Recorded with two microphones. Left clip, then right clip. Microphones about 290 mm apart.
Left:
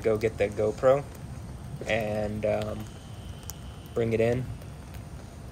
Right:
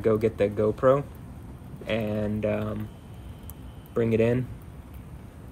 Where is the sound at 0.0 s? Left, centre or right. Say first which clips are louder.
Right 2 dB; centre.